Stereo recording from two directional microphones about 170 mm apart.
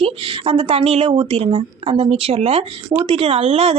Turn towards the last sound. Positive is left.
turn(degrees=-35)  # may be behind; listen again after turning